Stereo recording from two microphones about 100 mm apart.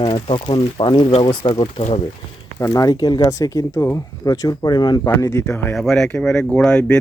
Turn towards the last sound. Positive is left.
turn(degrees=10)  # may be behind; listen again after turning